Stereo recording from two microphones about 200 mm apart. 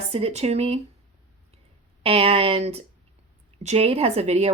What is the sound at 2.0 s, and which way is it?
Speech, 30° right (ahead or behind).